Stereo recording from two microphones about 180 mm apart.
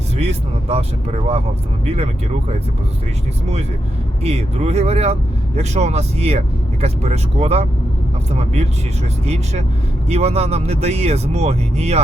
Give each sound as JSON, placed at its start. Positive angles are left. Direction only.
{"t": 0.2, "sound": "speech", "side_deg": -35}
{"t": 4.2, "sound": "speech", "side_deg": -35}